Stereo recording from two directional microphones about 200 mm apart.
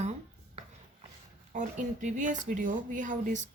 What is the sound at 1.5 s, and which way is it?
Speech, 40° right (ahead or behind).